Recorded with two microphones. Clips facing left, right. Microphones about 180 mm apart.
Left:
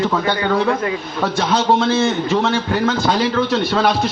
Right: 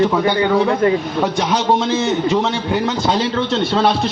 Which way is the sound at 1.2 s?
15° right (ahead or behind).